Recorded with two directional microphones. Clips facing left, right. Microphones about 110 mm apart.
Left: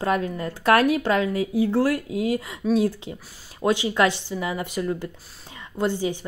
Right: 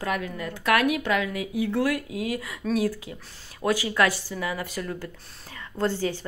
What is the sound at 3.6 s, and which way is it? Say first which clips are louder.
Speech: left 3 dB; 25° left (ahead or behind).